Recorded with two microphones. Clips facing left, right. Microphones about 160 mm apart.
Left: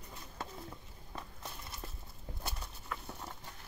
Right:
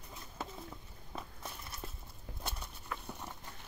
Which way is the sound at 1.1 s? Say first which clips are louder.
Right 1 dB; centre (ahead or behind).